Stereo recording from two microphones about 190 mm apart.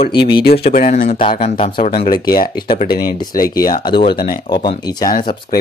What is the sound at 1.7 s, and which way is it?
Speech, 50° left (ahead or behind).